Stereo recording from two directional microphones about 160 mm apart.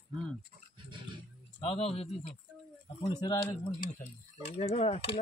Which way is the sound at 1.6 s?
35° left (ahead or behind).